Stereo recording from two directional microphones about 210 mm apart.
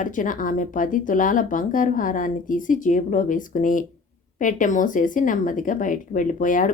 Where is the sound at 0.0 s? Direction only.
40° left (ahead or behind).